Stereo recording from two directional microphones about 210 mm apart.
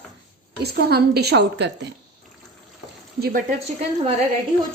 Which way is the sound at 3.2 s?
45° right (ahead or behind).